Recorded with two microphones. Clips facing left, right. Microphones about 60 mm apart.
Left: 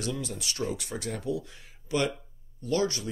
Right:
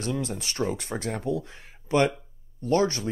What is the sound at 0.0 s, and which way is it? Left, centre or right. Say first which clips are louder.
Speech: right 4 dB; right.